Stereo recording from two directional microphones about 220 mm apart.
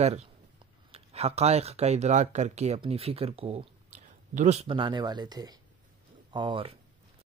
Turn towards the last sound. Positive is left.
turn(degrees=-25)  # may be behind; listen again after turning